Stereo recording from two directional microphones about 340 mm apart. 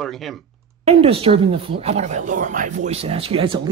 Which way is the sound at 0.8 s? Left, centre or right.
Centre.